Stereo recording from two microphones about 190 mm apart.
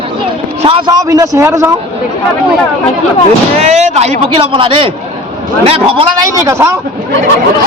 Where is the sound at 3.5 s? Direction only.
35° right (ahead or behind); by 6.7 s 15° right (ahead or behind).